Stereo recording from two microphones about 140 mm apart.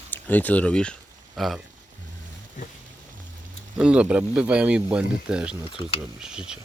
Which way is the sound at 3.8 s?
5° right (ahead or behind).